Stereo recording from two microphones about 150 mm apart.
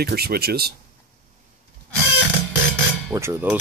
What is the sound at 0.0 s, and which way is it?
Speech, 90° right.